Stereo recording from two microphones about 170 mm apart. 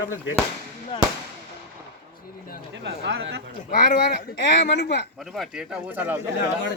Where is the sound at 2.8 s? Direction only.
80° right.